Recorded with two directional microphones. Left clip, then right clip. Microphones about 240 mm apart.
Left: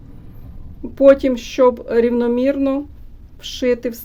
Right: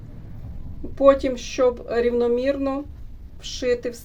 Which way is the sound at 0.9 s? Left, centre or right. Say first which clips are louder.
Left 5 dB; left.